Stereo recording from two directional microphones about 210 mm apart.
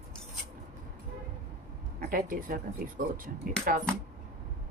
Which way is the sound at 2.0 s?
45° right (ahead or behind).